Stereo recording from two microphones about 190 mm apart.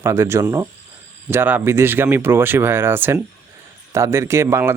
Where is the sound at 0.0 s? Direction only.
15° right (ahead or behind).